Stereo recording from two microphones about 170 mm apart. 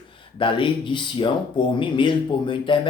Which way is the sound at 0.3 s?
30° left (ahead or behind).